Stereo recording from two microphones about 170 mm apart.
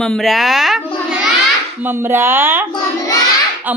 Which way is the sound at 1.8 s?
10° right (ahead or behind).